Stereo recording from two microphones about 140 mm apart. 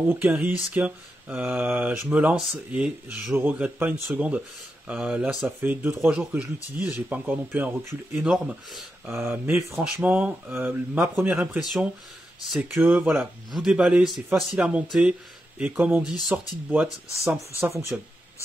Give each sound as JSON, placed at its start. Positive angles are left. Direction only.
{"t": 0.1, "sound": "speech", "side_deg": -15}
{"t": 9.0, "sound": "speech", "side_deg": -15}
{"t": 16.8, "sound": "speech", "side_deg": -15}